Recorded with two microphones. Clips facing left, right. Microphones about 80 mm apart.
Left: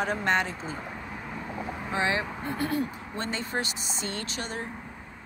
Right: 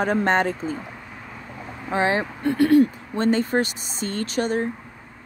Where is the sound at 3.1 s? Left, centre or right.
Right.